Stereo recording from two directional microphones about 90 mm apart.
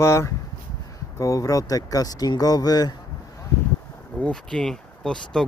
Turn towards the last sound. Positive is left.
turn(degrees=10)  # may be behind; listen again after turning